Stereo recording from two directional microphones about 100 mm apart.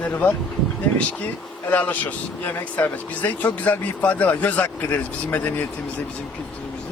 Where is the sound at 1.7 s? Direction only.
15° left (ahead or behind).